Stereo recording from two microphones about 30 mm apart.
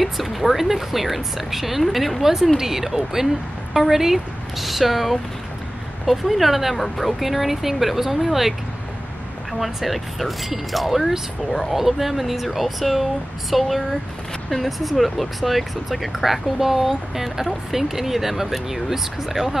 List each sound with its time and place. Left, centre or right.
0.0 s speech: centre
2.2 s speech: centre